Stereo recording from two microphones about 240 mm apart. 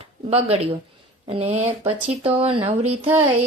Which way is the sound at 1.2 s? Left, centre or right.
Right.